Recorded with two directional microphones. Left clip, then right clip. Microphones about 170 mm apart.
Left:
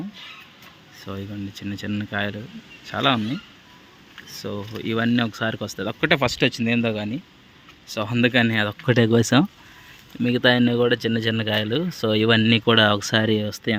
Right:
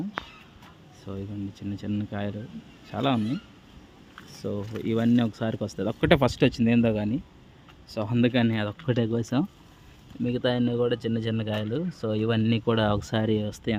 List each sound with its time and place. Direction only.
1.0 s speech: centre (ahead or behind)
4.3 s speech: 5° right (ahead or behind)
7.9 s speech: centre (ahead or behind)
8.9 s speech: 25° left (ahead or behind)